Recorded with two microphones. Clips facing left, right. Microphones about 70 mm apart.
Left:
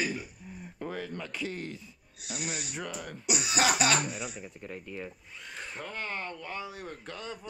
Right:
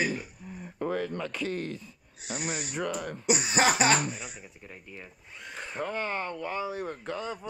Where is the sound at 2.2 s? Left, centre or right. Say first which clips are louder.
Right 3 dB; right.